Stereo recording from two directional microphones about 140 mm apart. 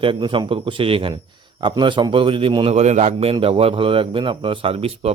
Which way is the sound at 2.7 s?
55° right (ahead or behind).